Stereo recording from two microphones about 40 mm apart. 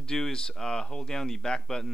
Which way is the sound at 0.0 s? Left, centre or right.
Centre.